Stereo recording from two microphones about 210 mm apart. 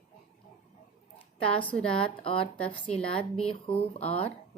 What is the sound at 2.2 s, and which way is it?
Speech, 25° left (ahead or behind).